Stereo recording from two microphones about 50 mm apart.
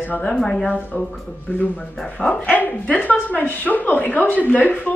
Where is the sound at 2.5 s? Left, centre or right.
Left.